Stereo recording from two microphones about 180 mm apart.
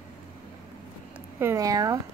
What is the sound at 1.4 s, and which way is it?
Speech, 15° right (ahead or behind).